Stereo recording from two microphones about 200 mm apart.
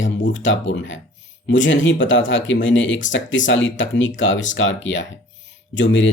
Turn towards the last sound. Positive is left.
turn(degrees=65)  # may be behind; listen again after turning